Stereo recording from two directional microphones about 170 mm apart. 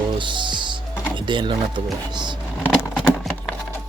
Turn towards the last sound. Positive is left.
turn(degrees=0)  # may be behind; listen again after turning